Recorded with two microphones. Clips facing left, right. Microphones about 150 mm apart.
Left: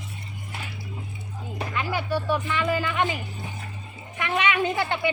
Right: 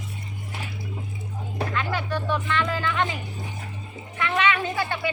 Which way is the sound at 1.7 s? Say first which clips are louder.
Left 2 dB; 10° left (ahead or behind).